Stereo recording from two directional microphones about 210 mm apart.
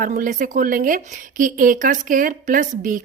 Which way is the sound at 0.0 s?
40° right (ahead or behind).